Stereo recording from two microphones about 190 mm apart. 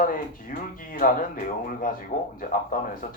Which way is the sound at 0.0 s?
45° left (ahead or behind).